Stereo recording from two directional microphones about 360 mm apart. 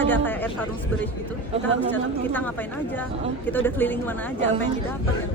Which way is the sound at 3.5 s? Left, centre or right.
Centre.